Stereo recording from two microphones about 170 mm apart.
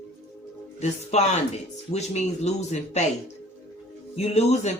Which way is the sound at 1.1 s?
40° left (ahead or behind).